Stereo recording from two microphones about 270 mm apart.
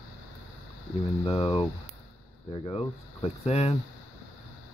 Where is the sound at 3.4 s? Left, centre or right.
Left.